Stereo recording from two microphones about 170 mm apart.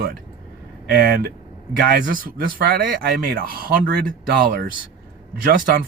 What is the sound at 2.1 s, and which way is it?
Speech, 55° right (ahead or behind).